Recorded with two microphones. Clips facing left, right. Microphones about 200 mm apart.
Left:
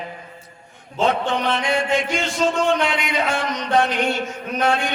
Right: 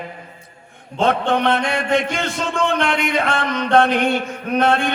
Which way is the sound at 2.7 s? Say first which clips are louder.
Right 2 dB; 55° right (ahead or behind).